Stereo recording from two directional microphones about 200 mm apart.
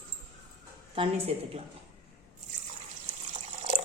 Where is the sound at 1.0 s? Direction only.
30° right (ahead or behind).